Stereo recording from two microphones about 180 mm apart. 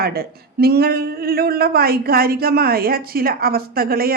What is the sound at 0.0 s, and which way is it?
Speech, 60° right (ahead or behind).